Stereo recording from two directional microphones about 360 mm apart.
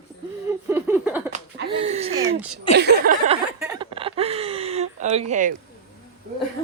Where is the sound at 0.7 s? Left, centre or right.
Centre.